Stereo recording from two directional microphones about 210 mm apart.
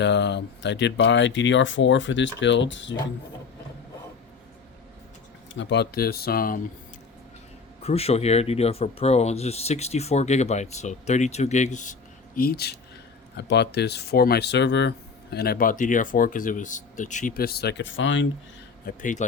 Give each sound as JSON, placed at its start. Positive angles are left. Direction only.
{"t": 0.0, "sound": "speech", "side_deg": 55}
{"t": 5.5, "sound": "speech", "side_deg": 55}
{"t": 7.8, "sound": "speech", "side_deg": 30}
{"t": 12.4, "sound": "speech", "side_deg": 45}
{"t": 18.9, "sound": "speech", "side_deg": 40}